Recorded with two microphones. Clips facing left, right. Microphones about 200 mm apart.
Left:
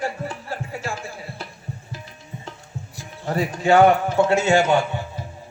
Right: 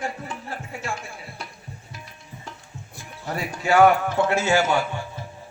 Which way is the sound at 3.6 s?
25° left (ahead or behind).